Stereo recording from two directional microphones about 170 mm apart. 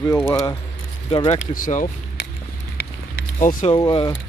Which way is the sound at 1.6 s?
50° left (ahead or behind).